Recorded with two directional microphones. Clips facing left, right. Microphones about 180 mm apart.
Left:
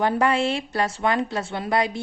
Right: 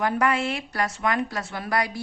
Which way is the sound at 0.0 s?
30° left (ahead or behind).